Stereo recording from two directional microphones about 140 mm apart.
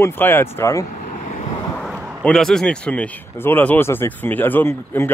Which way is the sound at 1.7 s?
Centre (ahead or behind).